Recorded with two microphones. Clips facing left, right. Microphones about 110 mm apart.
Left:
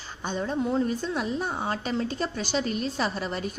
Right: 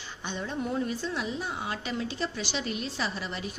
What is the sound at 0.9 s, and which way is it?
A woman's voice, 45° left (ahead or behind).